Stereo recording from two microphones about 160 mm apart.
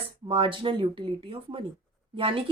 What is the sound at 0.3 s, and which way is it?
Speech, 35° right (ahead or behind).